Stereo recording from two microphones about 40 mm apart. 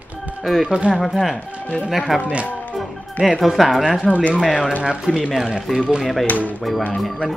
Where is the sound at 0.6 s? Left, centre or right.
Right.